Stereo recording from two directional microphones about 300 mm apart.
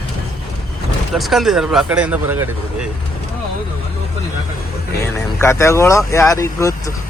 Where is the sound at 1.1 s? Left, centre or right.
Centre.